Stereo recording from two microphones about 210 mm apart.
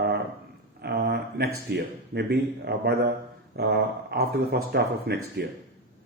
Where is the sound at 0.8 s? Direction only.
50° right (ahead or behind).